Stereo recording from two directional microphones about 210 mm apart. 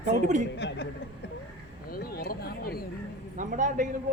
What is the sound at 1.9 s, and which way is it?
Speech, 45° left (ahead or behind).